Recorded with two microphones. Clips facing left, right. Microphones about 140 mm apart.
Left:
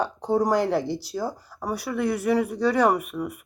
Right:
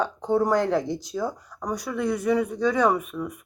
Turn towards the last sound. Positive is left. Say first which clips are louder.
# left 1 dB
turn(degrees=10)  # may be behind; listen again after turning